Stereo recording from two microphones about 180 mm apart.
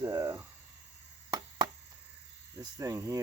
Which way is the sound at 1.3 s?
20° right (ahead or behind).